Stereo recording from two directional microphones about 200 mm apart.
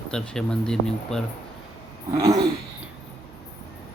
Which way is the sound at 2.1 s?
20° right (ahead or behind).